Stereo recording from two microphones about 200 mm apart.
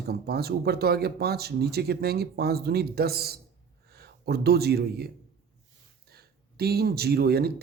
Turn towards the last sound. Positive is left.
turn(degrees=-50)  # may be behind; listen again after turning